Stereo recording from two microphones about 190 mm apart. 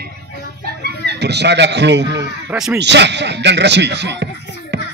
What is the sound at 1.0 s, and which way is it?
A man's voice, 60° right (ahead or behind).